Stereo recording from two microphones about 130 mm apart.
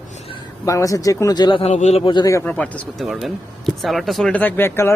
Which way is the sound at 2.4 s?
10° left (ahead or behind).